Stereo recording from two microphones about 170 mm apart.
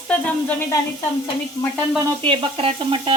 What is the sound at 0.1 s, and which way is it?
Speech, 10° left (ahead or behind).